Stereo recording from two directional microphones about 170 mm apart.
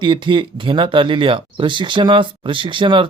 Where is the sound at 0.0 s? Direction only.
30° right (ahead or behind).